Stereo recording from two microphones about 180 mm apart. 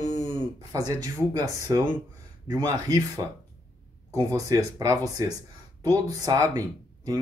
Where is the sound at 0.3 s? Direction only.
20° right (ahead or behind).